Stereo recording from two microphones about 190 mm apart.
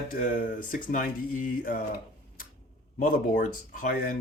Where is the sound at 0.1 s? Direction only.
45° left (ahead or behind).